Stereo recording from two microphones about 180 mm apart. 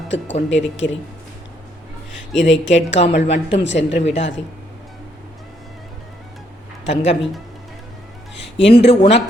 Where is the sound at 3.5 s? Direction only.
75° left (ahead or behind).